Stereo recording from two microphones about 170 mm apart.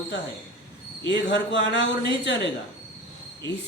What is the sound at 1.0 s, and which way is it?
Speech, 90° left.